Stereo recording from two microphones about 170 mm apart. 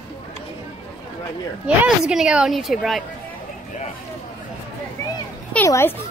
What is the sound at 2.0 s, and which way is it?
Speech, 5° right (ahead or behind).